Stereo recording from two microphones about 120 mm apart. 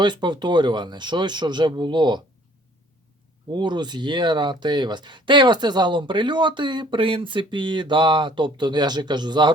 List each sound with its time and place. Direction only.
0.0 s speech: 40° right (ahead or behind)
3.5 s speech: 40° right (ahead or behind)